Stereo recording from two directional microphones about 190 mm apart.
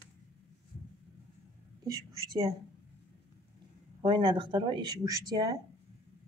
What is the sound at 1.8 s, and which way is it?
Speech, 20° right (ahead or behind).